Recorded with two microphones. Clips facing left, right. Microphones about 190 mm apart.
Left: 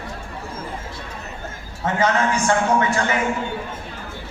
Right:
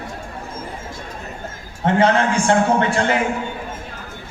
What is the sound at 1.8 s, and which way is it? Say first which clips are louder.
A man's voice: right 4 dB; 30° right (ahead or behind).